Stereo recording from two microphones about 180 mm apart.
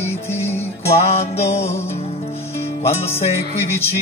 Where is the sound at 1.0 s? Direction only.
35° left (ahead or behind).